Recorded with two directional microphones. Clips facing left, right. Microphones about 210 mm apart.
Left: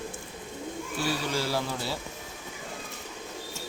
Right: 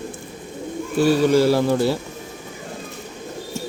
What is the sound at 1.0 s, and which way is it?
Speech, 55° right (ahead or behind).